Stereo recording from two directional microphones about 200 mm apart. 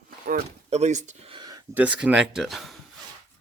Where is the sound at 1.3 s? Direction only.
20° right (ahead or behind).